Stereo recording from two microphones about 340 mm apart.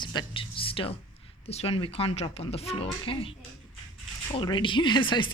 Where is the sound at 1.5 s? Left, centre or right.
Centre.